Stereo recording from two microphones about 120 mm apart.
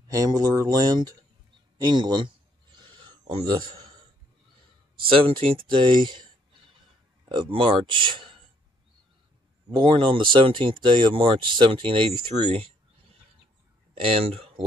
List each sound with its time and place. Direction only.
0.1 s speech: 30° right (ahead or behind)
1.8 s a sound: 35° right (ahead or behind)
5.0 s speech: 50° right (ahead or behind)
9.7 s speech: 40° right (ahead or behind)
13.9 s speech: 55° right (ahead or behind)